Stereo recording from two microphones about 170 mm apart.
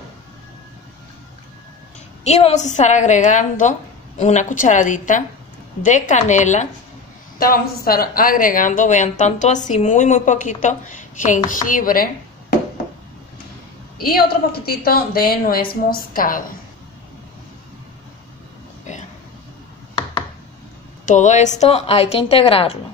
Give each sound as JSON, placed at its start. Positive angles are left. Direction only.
{"t": 2.2, "sound": "speech", "side_deg": 40}
{"t": 7.3, "sound": "speech", "side_deg": 60}
{"t": 14.0, "sound": "a woman's voice", "side_deg": 65}
{"t": 18.9, "sound": "a sound", "side_deg": 45}
{"t": 21.0, "sound": "a woman's voice", "side_deg": 45}